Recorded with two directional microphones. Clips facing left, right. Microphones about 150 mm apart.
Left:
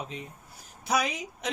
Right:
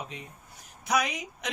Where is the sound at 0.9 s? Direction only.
30° left (ahead or behind).